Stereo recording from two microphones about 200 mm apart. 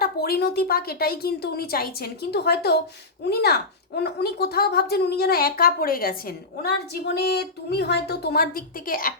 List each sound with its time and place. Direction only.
0.0 s a woman's voice: 50° left (ahead or behind)